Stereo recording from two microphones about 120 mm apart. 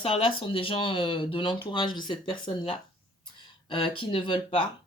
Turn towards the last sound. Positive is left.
turn(degrees=45)  # may be behind; listen again after turning